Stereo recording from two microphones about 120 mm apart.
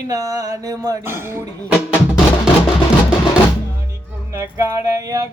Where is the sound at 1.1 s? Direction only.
20° right (ahead or behind).